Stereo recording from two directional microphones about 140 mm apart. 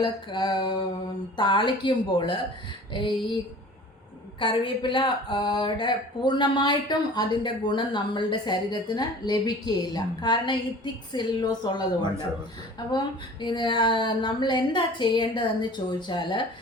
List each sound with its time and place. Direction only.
0.0 s speech: 35° left (ahead or behind)
13.4 s speech: 35° left (ahead or behind)